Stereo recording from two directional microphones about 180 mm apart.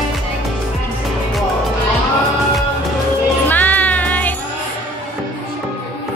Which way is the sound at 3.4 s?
10° left (ahead or behind).